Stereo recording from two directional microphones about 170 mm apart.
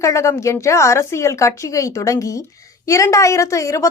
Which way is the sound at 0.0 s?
15° left (ahead or behind).